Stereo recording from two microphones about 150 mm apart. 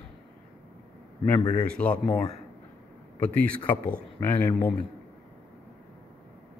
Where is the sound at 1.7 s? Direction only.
10° left (ahead or behind).